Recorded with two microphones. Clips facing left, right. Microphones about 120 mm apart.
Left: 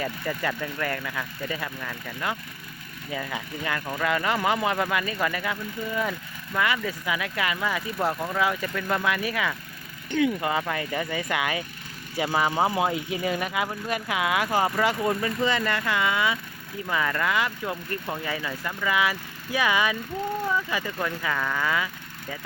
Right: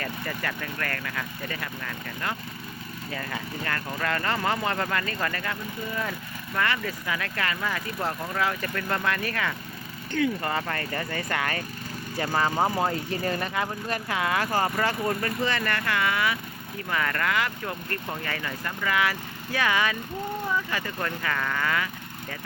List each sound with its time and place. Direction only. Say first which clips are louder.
0.0 s speech: left 3 dB; 15° left (ahead or behind)